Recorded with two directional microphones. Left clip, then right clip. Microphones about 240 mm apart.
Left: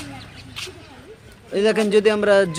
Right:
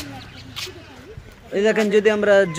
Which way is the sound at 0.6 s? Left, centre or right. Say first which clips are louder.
Right 1 dB; right.